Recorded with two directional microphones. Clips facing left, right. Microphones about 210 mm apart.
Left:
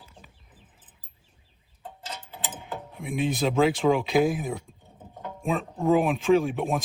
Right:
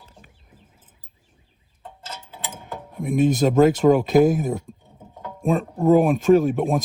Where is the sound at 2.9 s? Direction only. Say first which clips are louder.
Right 9 dB; 45° right (ahead or behind).